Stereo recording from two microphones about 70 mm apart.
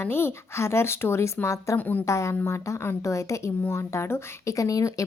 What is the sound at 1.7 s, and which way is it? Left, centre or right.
Speech, left.